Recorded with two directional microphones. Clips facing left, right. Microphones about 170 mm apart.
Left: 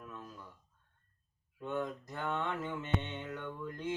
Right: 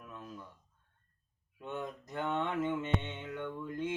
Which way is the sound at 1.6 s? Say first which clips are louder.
Left 3 dB; 20° right (ahead or behind).